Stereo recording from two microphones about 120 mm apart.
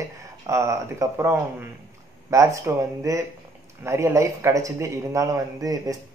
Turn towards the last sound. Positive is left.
turn(degrees=-30)  # may be behind; listen again after turning